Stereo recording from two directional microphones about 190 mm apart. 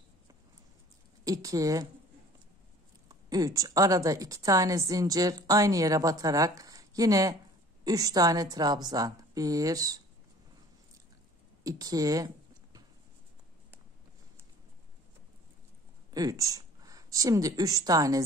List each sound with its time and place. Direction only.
1.2 s a woman's voice: 20° right (ahead or behind)
3.1 s a woman's voice: 20° right (ahead or behind)
11.6 s a woman's voice: 20° right (ahead or behind)
16.1 s speech: 20° right (ahead or behind)